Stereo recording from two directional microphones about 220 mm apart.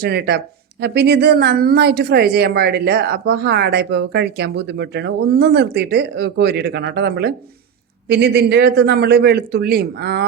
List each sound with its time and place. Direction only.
0.0 s speech: 45° right (ahead or behind)